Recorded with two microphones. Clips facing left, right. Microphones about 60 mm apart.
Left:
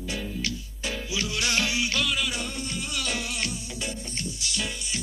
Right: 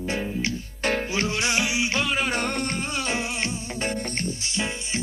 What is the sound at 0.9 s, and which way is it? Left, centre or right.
Music, right.